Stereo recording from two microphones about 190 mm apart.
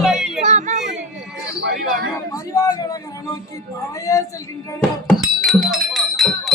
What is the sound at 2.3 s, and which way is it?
A man's voice, 20° left (ahead or behind).